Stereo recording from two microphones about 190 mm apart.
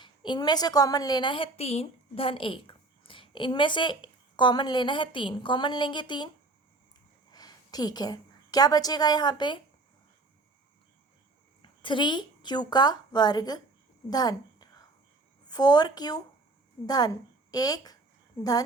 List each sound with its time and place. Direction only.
0.0 s a woman's voice: 25° left (ahead or behind)
11.6 s a woman's voice: 25° left (ahead or behind)